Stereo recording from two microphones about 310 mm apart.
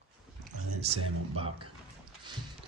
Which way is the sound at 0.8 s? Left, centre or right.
Centre.